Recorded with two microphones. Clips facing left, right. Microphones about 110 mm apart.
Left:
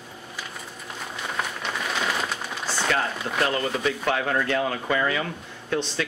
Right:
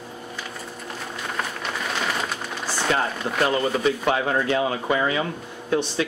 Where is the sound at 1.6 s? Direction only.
Centre (ahead or behind).